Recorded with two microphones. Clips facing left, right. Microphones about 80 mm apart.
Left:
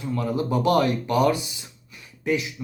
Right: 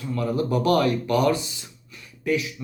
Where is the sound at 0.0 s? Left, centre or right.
Centre.